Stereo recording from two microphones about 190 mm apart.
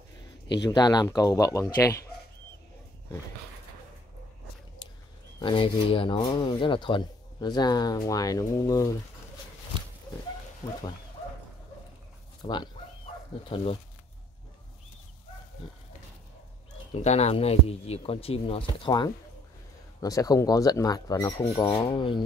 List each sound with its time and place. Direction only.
0.7 s speech: 20° left (ahead or behind)
4.8 s a sound: 25° left (ahead or behind)
5.4 s speech: 30° left (ahead or behind)
12.4 s speech: 25° left (ahead or behind)
16.9 s speech: 35° left (ahead or behind)